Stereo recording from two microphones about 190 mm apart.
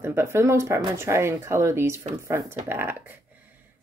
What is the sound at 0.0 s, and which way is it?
Speech, 15° right (ahead or behind).